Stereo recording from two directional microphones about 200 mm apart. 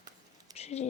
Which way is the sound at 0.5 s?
30° left (ahead or behind).